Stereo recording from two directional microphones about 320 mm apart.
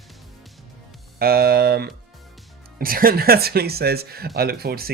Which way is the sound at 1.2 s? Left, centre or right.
Right.